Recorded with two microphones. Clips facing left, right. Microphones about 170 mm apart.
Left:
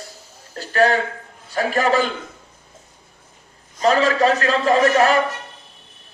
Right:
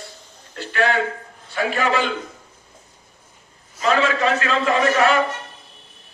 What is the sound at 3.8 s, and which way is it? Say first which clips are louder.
A man's voice: left 3 dB; 35° left (ahead or behind).